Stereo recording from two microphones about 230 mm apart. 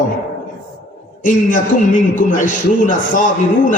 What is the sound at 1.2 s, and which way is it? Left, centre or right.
A man's voice, left.